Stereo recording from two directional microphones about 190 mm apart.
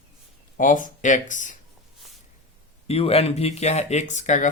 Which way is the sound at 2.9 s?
30° left (ahead or behind).